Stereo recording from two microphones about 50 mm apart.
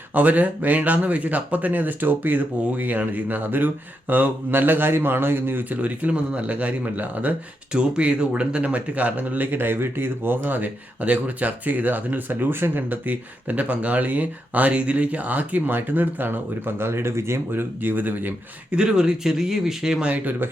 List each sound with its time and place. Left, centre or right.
0.1 s a man's voice: right
5.7 s speech: right
7.7 s speech: right
17.9 s speech: right
18.7 s speech: centre
20.1 s speech: right